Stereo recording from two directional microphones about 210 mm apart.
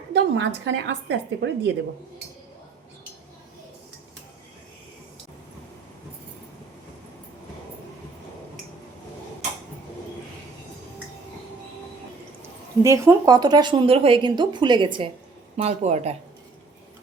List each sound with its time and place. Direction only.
0.1 s a woman's voice: 55° right (ahead or behind)
12.8 s a woman's voice: 15° right (ahead or behind); by 16.1 s 30° right (ahead or behind)